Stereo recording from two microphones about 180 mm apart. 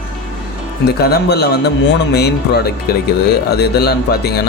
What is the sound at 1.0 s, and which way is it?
Speech, 65° left (ahead or behind).